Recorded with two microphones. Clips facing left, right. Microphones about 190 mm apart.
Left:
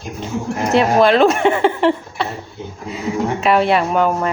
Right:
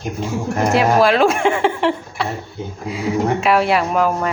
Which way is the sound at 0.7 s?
Centre (ahead or behind).